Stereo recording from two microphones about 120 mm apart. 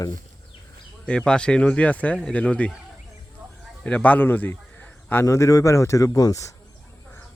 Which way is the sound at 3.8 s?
10° left (ahead or behind).